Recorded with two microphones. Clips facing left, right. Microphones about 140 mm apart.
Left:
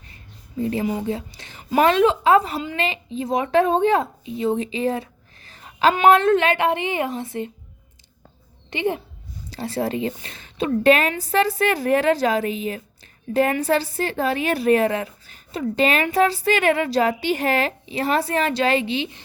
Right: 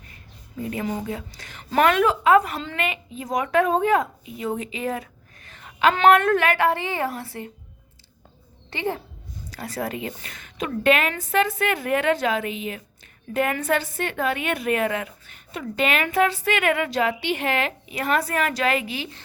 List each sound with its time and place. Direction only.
0.6 s a woman's voice: 30° left (ahead or behind)
8.7 s a woman's voice: 20° left (ahead or behind)